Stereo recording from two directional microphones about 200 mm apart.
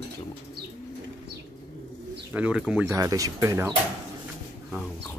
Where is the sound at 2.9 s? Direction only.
15° right (ahead or behind).